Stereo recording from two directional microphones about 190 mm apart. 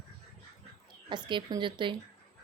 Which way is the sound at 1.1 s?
25° right (ahead or behind).